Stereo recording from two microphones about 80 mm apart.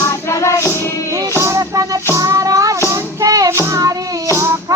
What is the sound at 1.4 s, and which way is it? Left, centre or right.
Music, right.